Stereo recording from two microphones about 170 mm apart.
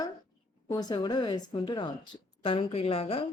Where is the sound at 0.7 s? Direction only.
25° left (ahead or behind).